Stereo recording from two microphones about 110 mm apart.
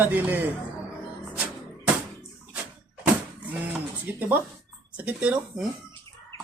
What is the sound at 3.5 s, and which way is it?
Speech, 15° right (ahead or behind).